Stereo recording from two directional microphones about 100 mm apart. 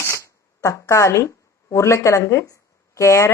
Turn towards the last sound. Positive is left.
turn(degrees=30)  # may be behind; listen again after turning